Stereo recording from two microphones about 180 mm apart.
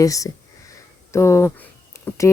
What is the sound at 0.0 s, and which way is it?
Speech, 20° left (ahead or behind).